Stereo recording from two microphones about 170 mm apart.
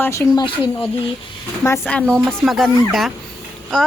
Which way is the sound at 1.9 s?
5° left (ahead or behind).